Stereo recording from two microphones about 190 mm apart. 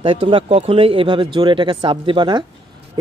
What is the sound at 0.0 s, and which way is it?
Speech, 25° right (ahead or behind).